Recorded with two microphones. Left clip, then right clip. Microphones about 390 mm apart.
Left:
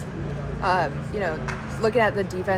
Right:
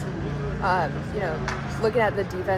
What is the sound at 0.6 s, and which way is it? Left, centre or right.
Speech, left.